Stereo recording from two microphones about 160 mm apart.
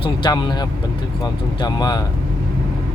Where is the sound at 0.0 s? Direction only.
30° left (ahead or behind).